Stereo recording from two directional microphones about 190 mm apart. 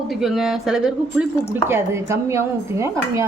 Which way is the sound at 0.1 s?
Centre (ahead or behind).